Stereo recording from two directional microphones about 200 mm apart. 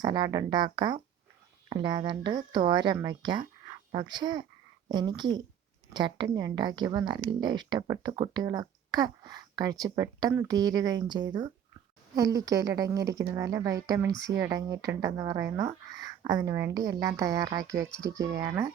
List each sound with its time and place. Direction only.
0.0 s a woman's voice: 20° right (ahead or behind)